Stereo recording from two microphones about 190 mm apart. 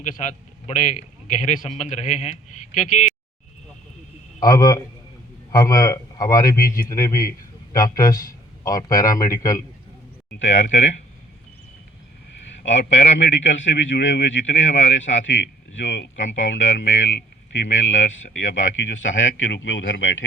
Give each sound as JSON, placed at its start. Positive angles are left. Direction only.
{"t": 0.0, "sound": "a man's voice", "side_deg": 40}
{"t": 4.4, "sound": "a man's voice", "side_deg": 20}
{"t": 12.6, "sound": "a man's voice", "side_deg": 70}